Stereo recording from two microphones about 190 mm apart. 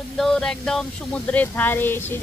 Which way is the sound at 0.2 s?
5° left (ahead or behind).